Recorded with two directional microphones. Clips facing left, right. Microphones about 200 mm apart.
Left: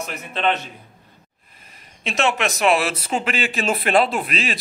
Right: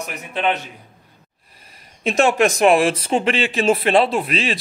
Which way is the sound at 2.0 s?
35° right (ahead or behind).